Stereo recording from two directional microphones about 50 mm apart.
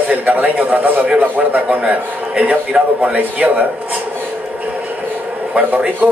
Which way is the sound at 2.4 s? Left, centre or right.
Right.